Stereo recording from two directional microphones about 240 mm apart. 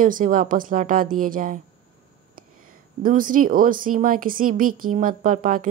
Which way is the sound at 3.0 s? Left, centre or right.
Right.